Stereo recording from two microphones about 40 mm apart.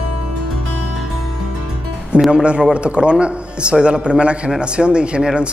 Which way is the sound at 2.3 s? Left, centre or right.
Right.